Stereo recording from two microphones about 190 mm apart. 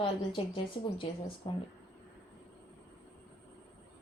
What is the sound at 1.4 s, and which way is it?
Speech, 20° left (ahead or behind).